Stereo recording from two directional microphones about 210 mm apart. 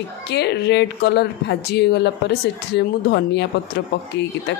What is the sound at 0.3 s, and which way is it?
Speech, 50° left (ahead or behind).